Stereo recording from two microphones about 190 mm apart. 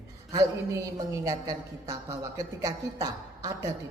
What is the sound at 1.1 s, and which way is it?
A woman's voice, 15° right (ahead or behind).